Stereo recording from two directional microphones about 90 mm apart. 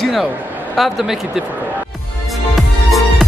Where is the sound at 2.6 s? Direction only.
Centre (ahead or behind).